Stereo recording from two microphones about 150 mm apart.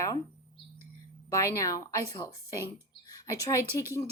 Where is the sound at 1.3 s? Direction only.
20° left (ahead or behind).